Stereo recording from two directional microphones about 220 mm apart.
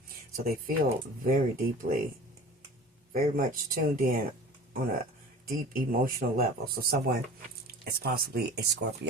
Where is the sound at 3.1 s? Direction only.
40° right (ahead or behind).